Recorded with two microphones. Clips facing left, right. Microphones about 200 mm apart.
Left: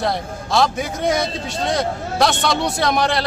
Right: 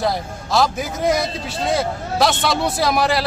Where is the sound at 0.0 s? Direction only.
Centre (ahead or behind).